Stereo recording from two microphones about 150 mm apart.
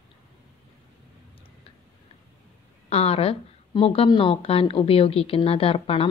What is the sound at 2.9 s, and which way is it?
A woman's voice, 40° left (ahead or behind).